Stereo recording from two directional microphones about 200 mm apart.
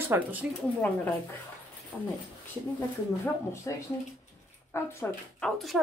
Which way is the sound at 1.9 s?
5° left (ahead or behind).